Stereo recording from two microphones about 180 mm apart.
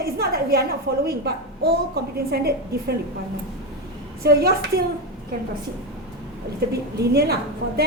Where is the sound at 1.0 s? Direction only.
60° right (ahead or behind).